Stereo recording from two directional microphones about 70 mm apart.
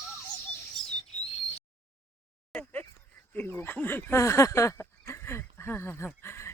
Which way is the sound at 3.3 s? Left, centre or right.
Left.